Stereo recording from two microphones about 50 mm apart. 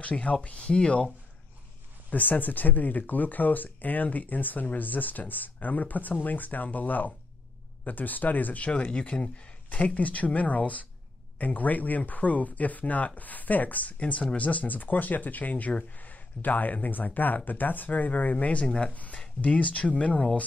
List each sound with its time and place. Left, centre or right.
0.0 s speech: left